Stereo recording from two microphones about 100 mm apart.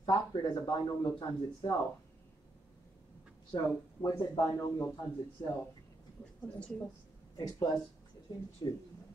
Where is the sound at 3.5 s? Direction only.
35° left (ahead or behind).